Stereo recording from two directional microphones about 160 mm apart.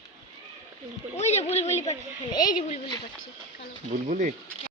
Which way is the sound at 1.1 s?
45° left (ahead or behind).